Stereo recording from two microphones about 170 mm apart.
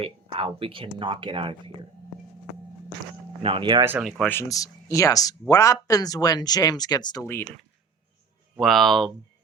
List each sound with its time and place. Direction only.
0.0 s speech: 35° right (ahead or behind)
3.4 s speech: 30° right (ahead or behind)
4.0 s speech: 10° left (ahead or behind); by 7.3 s 25° left (ahead or behind)
8.5 s speech: centre (ahead or behind)